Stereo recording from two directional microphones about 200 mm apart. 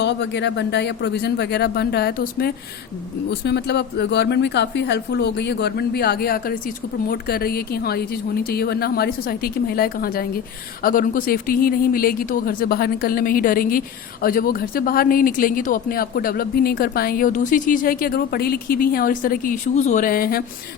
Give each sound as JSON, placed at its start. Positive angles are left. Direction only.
{"t": 0.0, "sound": "speech", "side_deg": 60}